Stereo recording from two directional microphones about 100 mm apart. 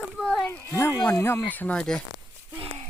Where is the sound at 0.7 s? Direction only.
25° left (ahead or behind).